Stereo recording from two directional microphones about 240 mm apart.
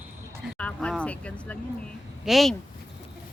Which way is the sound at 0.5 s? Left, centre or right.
Centre.